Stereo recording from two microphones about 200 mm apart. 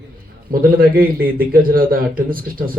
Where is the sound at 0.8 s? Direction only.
45° right (ahead or behind).